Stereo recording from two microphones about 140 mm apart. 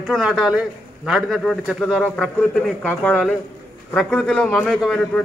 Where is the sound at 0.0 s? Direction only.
5° right (ahead or behind).